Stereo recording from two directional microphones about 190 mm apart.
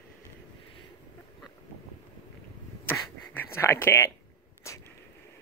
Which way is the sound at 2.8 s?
10° left (ahead or behind).